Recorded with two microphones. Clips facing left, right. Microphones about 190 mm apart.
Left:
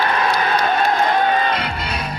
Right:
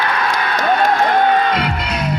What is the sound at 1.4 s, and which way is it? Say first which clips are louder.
Music: right 4 dB; 80° right.